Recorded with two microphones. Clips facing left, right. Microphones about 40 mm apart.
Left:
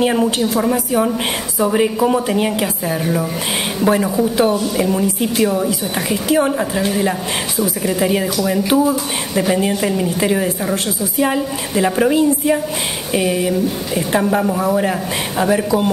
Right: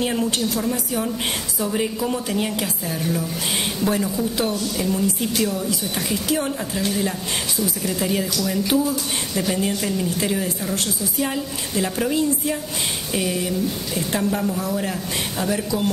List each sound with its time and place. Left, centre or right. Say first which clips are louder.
0.0 s a woman's voice: left 7 dB; left
0.7 s a woman's voice: left 8 dB; left